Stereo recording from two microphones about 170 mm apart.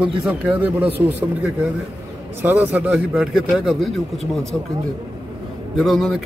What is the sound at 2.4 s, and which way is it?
A man's voice, 10° right (ahead or behind).